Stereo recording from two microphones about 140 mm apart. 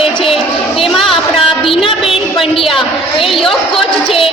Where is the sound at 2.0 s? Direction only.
5° right (ahead or behind).